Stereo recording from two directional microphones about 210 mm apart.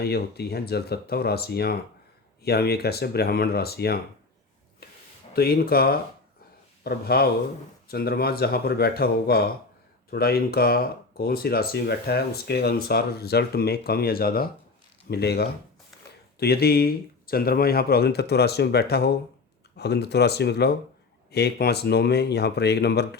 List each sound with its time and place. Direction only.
0.0 s speech: 50° left (ahead or behind)
5.3 s speech: 45° left (ahead or behind)